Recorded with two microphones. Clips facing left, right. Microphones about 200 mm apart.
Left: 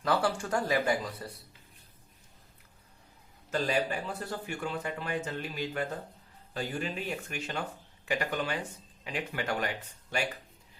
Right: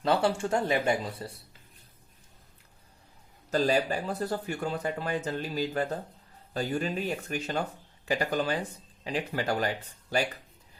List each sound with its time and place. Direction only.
0.0 s speech: 25° right (ahead or behind)
3.5 s speech: 40° right (ahead or behind)